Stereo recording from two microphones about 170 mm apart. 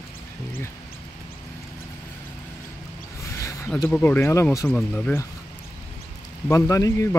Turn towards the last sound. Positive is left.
turn(degrees=15)  # may be behind; listen again after turning